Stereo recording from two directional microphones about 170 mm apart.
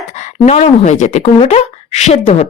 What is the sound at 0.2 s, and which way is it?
Speech, 40° left (ahead or behind).